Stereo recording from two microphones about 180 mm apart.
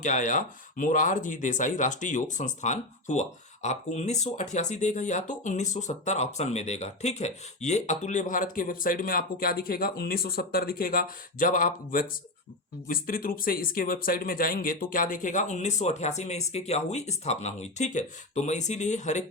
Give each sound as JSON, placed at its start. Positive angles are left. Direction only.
{"t": 0.0, "sound": "speech", "side_deg": 45}